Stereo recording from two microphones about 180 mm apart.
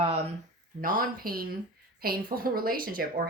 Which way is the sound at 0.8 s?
50° right (ahead or behind).